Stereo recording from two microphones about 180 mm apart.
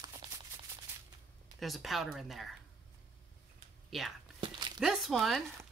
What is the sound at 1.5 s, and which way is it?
Speech, centre (ahead or behind).